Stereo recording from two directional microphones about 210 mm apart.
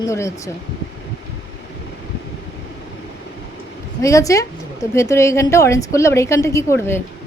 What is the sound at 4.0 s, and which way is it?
A woman's voice, 15° left (ahead or behind).